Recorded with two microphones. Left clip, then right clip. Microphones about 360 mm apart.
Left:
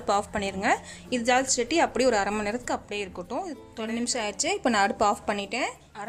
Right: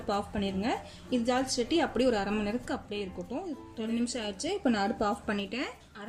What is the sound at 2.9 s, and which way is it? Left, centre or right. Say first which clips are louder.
Speech: left 5 dB; left.